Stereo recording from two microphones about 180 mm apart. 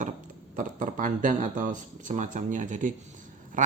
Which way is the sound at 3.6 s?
45° right (ahead or behind).